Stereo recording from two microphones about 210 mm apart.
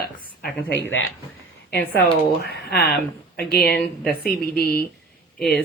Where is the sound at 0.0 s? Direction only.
50° left (ahead or behind).